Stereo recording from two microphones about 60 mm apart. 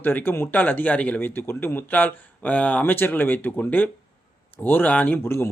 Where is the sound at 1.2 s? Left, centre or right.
Left.